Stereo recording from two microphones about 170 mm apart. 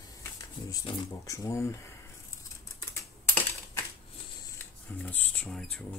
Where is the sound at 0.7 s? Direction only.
20° left (ahead or behind).